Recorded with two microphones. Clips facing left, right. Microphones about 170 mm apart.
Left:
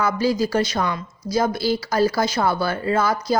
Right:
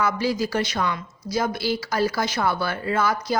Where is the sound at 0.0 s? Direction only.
40° left (ahead or behind).